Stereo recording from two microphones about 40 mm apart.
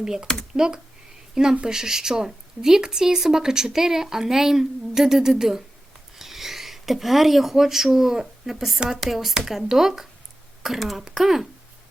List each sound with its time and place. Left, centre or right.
0.0 s speech: centre